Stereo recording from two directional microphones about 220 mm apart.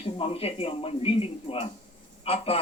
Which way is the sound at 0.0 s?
25° left (ahead or behind).